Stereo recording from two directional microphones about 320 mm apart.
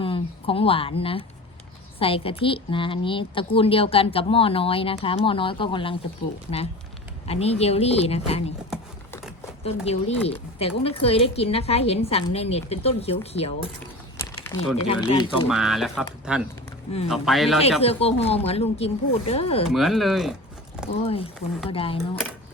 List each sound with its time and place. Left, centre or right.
0.0 s a woman's voice: centre
7.3 s speech: centre
8.7 s a sound: centre
9.6 s a woman's voice: centre
15.4 s speech: centre
17.6 s speech: centre
19.6 s speech: centre
21.7 s a woman's voice: centre